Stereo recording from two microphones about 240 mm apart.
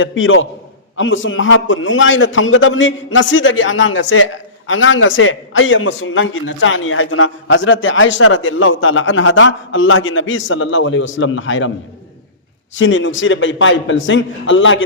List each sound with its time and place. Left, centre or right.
0.0 s a man's voice: left
12.7 s a man's voice: left